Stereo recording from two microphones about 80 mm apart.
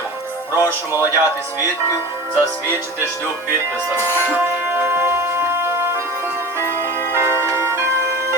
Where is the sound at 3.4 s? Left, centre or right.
Right.